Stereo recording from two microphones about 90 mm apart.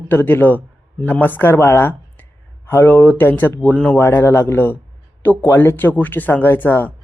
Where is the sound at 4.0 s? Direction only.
25° left (ahead or behind).